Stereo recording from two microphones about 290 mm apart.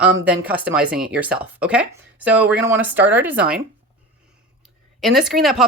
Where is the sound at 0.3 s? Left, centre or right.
Centre.